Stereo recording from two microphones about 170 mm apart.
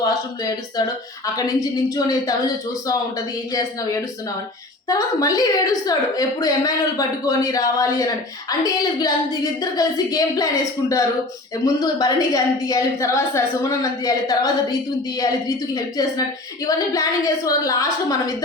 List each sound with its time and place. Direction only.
0.8 s a woman's voice: 20° left (ahead or behind)
3.5 s a woman's voice: 20° left (ahead or behind)